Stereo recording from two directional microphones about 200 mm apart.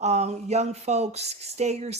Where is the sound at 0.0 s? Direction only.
35° right (ahead or behind).